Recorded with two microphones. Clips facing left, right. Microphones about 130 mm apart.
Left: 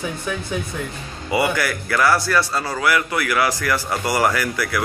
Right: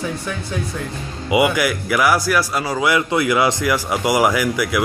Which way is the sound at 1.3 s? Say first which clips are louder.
Right 4 dB; 15° right (ahead or behind).